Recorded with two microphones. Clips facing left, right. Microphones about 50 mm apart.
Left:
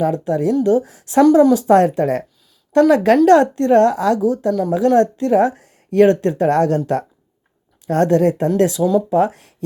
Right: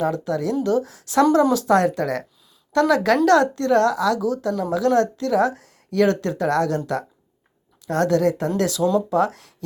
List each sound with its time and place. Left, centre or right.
0.0 s a woman's voice: left
1.2 s a woman's voice: centre
1.5 s a woman's voice: left
8.8 s speech: centre
9.0 s speech: left